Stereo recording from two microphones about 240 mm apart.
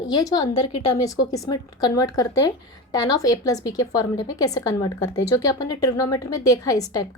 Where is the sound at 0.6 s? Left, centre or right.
Left.